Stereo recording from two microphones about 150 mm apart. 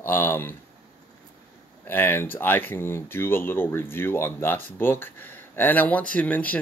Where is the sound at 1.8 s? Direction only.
15° left (ahead or behind).